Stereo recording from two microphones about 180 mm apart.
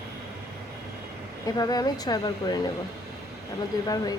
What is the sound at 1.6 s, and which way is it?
A woman's voice, 20° left (ahead or behind).